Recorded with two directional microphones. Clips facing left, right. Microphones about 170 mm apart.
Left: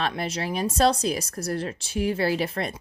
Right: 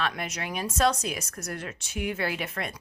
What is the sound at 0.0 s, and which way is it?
Speech, 30° left (ahead or behind).